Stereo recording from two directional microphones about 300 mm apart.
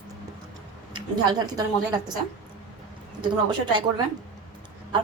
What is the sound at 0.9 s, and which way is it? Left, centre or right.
A woman's voice, centre.